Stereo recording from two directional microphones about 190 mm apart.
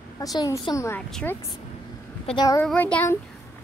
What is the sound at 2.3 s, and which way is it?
Speech, 25° left (ahead or behind).